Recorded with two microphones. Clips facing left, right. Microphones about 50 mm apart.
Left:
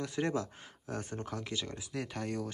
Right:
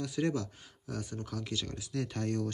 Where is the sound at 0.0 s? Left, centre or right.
Left.